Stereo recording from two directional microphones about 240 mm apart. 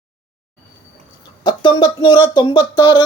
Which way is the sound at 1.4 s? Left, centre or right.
Centre.